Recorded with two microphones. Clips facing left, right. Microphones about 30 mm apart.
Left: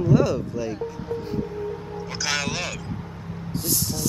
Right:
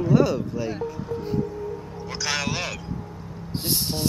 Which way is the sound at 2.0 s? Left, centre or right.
Centre.